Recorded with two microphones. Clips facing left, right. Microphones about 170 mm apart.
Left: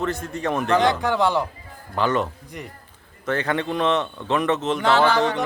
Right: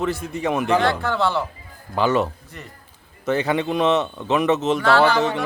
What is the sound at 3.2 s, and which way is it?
A man's voice, 10° right (ahead or behind).